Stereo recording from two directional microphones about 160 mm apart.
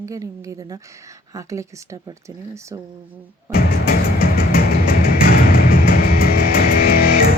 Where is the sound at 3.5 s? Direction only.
70° left (ahead or behind).